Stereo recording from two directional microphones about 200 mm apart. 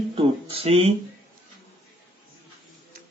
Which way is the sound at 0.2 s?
30° right (ahead or behind).